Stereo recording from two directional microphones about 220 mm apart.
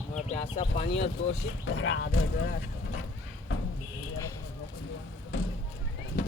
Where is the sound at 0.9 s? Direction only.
55° left (ahead or behind).